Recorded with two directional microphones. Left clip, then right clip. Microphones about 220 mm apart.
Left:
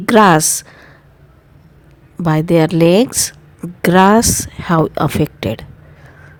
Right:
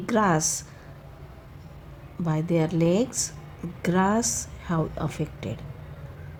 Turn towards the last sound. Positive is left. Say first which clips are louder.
# left 15 dB
turn(degrees=40)  # may be behind; listen again after turning